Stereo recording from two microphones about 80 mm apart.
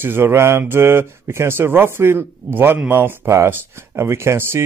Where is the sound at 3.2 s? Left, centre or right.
Right.